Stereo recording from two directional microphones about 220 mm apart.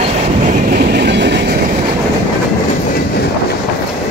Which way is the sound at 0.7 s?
45° right (ahead or behind).